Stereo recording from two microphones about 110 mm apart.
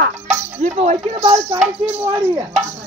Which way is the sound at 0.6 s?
90° right.